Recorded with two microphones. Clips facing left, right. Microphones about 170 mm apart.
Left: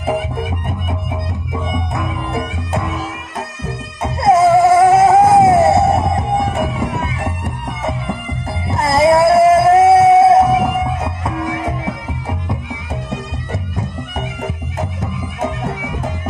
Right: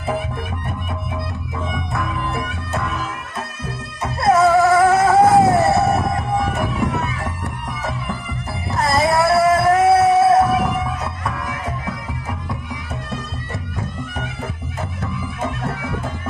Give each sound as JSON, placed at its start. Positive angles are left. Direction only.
{"t": 2.0, "sound": "music", "side_deg": 20}
{"t": 4.0, "sound": "dog", "side_deg": 20}
{"t": 7.0, "sound": "music", "side_deg": 25}
{"t": 13.7, "sound": "bagpipes", "side_deg": 20}
{"t": 14.8, "sound": "music", "side_deg": 20}